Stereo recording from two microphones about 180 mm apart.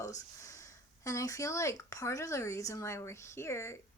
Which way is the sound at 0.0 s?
20° left (ahead or behind).